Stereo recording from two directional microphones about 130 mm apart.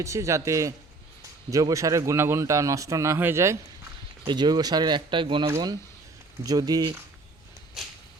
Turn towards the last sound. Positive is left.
turn(degrees=0)  # may be behind; listen again after turning